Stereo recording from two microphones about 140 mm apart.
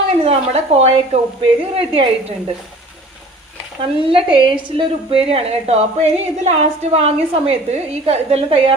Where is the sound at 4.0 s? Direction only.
40° right (ahead or behind).